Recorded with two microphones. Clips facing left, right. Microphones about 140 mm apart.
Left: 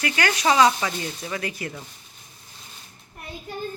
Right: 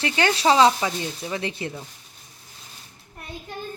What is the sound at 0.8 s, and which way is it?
Speech, 15° right (ahead or behind).